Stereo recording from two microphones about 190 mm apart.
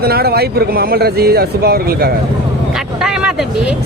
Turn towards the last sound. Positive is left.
turn(degrees=-5)  # may be behind; listen again after turning